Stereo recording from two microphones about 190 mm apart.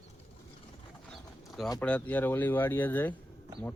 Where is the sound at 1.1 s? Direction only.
Centre (ahead or behind).